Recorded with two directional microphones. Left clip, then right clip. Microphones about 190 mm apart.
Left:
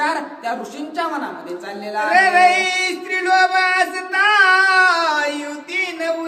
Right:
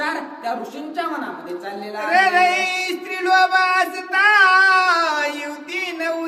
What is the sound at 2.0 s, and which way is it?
Male singing, 15° right (ahead or behind).